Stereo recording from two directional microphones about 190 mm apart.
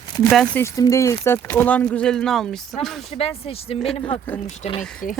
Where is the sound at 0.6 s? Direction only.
15° left (ahead or behind); by 2.6 s centre (ahead or behind).